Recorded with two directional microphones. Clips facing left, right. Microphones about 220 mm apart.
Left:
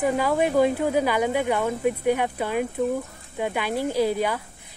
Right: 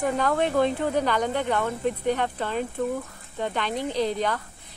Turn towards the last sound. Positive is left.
turn(degrees=10)  # may be behind; listen again after turning